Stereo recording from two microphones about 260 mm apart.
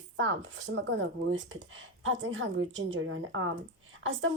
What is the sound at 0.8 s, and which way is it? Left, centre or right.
Speech, right.